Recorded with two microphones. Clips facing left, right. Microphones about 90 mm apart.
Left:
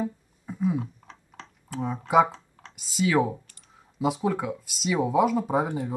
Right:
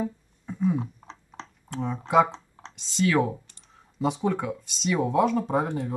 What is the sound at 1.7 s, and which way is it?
Speech, 5° left (ahead or behind).